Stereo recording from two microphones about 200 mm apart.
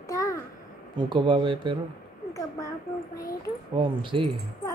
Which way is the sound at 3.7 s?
25° right (ahead or behind).